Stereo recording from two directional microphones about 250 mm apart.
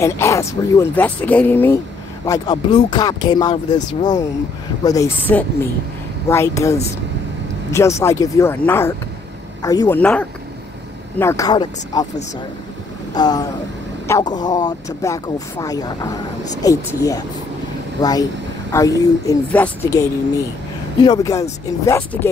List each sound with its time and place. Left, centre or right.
0.0 s speech: centre
13.1 s speech: centre